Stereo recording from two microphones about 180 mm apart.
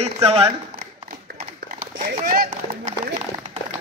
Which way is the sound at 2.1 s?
50° right (ahead or behind).